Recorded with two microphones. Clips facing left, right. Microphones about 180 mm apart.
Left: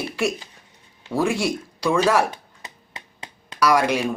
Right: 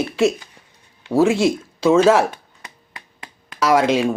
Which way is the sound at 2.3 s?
20° left (ahead or behind).